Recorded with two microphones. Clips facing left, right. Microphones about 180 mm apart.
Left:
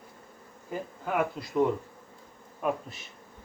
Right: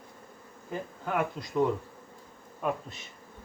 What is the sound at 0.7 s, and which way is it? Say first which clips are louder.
Speech: left 1 dB; 5° left (ahead or behind).